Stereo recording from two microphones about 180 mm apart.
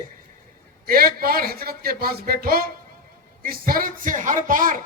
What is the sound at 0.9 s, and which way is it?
A man's voice, 55° right (ahead or behind).